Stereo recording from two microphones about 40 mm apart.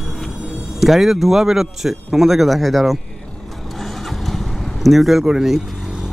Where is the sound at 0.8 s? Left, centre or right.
Centre.